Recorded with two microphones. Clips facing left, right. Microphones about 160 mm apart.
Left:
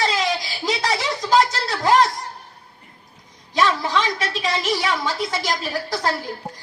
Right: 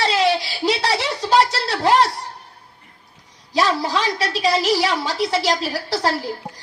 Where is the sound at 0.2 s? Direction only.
30° right (ahead or behind).